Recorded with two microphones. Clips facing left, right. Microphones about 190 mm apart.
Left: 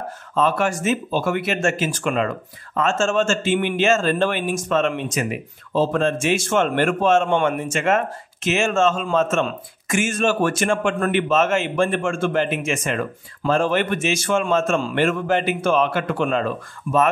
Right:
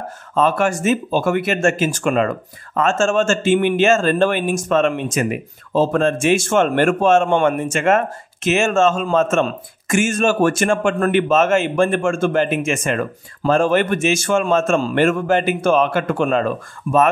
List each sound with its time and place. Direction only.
0.3 s speech: 50° right (ahead or behind)